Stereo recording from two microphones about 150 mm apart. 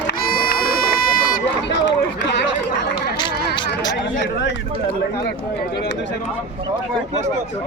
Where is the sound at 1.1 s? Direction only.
75° left (ahead or behind).